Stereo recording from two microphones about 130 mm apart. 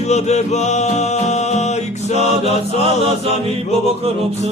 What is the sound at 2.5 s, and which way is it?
Chant, 50° right (ahead or behind).